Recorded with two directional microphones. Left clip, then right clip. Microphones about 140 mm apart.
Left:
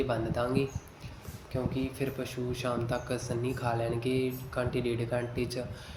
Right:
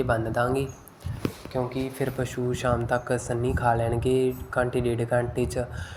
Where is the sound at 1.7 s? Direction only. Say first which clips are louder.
Right 5 dB; 25° right (ahead or behind).